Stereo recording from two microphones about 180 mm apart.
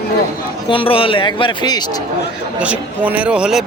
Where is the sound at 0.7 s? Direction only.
30° left (ahead or behind).